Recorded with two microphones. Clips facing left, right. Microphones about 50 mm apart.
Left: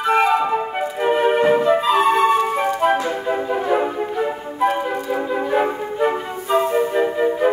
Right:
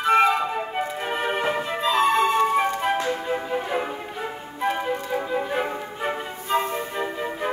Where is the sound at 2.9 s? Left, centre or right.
Centre.